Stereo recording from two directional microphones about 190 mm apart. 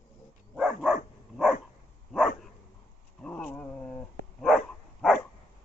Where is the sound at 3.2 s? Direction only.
5° left (ahead or behind).